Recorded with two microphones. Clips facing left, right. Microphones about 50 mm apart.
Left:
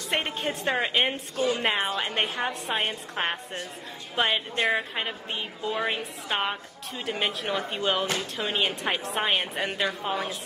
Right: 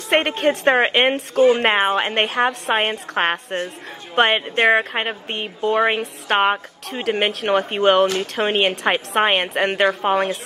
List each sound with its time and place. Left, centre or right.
0.1 s a woman's voice: right
1.3 s a woman's voice: right
1.6 s a woman's voice: right
4.1 s a woman's voice: right